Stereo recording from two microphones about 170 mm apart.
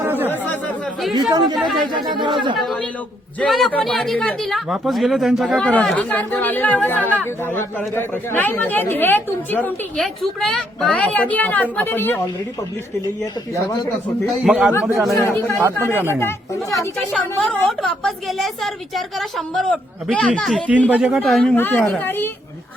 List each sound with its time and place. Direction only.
0.0 s chatter: 10° right (ahead or behind)
1.1 s speech: 25° right (ahead or behind)
1.5 s a woman's voice: centre (ahead or behind)
1.9 s speech: 25° right (ahead or behind)
2.6 s a woman's voice: centre (ahead or behind)
14.3 s a man's voice: 5° right (ahead or behind)
15.1 s speech: 15° left (ahead or behind)
17.1 s a woman's voice: 5° left (ahead or behind)
21.5 s speech: 10° left (ahead or behind)